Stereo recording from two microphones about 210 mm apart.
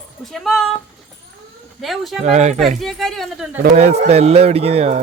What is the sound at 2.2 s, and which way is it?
Speech, 35° right (ahead or behind).